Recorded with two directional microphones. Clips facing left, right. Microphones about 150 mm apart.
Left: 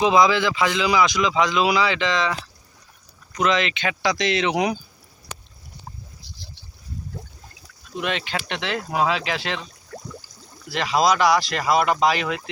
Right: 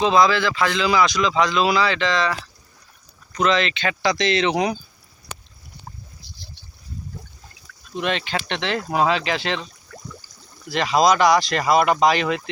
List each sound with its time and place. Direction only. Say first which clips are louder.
0.0 s speech: even; 15° left (ahead or behind)
3.3 s speech: right 1 dB; 15° left (ahead or behind)
7.9 s speech: right 2 dB; 5° left (ahead or behind)
10.7 s speech: right 2 dB; centre (ahead or behind)